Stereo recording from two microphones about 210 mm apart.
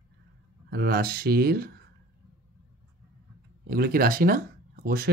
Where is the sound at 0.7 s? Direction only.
50° right (ahead or behind).